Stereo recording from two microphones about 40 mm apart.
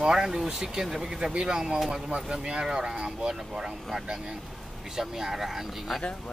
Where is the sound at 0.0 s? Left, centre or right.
Centre.